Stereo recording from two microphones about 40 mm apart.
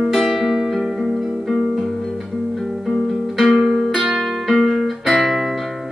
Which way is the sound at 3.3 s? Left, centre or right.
Centre.